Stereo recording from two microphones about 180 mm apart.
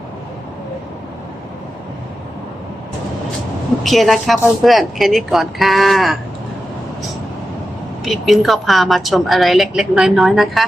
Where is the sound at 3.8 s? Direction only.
Centre (ahead or behind).